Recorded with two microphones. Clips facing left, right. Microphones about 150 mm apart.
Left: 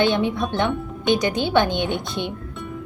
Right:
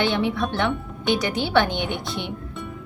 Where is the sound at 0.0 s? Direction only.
20° left (ahead or behind).